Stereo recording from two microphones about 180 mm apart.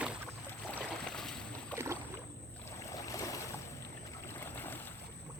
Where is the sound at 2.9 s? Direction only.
20° left (ahead or behind).